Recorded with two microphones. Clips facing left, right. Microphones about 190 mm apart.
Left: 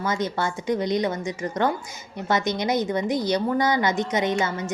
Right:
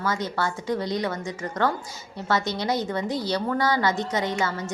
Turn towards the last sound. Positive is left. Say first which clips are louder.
# left 3 dB
turn(degrees=20)  # may be behind; listen again after turning